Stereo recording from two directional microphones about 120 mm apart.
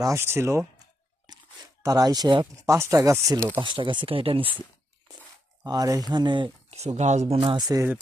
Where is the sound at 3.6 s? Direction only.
45° right (ahead or behind).